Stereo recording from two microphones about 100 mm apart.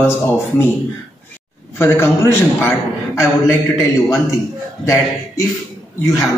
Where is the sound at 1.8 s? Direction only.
25° left (ahead or behind).